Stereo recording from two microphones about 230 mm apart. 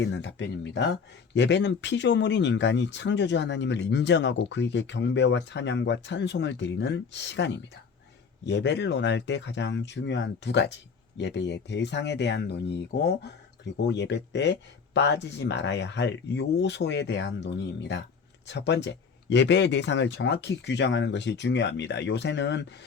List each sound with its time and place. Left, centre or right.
0.0 s speech: left